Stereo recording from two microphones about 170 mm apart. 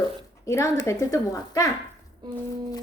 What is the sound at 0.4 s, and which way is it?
A woman's voice, 20° left (ahead or behind).